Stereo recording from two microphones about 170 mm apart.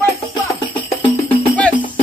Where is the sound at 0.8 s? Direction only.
10° left (ahead or behind).